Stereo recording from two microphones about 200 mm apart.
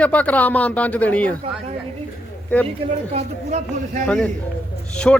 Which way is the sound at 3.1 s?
35° right (ahead or behind).